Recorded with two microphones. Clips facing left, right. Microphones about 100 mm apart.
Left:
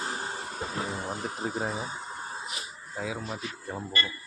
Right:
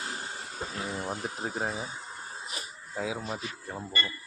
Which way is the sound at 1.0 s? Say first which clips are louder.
Left 1 dB; 5° right (ahead or behind).